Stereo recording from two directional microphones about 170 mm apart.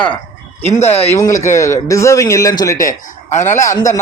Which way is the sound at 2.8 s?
45° left (ahead or behind).